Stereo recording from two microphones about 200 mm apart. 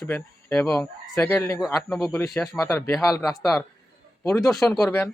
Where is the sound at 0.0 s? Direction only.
10° left (ahead or behind).